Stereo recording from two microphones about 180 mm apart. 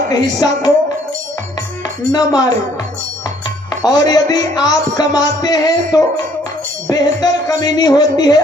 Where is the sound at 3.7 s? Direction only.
20° left (ahead or behind).